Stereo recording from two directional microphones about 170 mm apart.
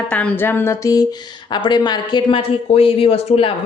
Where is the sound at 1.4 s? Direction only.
25° left (ahead or behind).